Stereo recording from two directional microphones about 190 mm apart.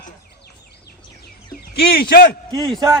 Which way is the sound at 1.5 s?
55° left (ahead or behind).